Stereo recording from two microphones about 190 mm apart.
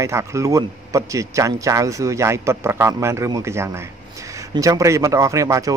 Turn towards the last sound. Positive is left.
turn(degrees=-15)  # may be behind; listen again after turning